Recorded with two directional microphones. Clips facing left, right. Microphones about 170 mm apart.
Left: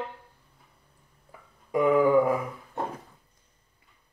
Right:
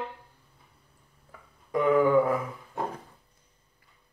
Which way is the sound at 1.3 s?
10° left (ahead or behind).